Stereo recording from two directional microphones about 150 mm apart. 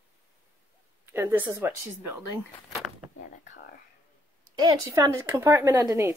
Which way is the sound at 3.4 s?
55° left (ahead or behind).